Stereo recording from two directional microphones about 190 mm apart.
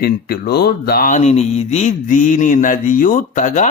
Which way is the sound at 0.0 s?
55° left (ahead or behind).